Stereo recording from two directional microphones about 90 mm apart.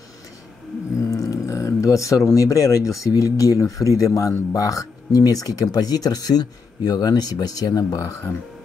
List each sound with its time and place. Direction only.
1.1 s speech: 35° left (ahead or behind)